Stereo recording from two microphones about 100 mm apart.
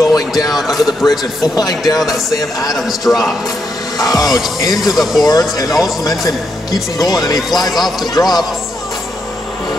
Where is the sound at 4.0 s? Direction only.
40° left (ahead or behind).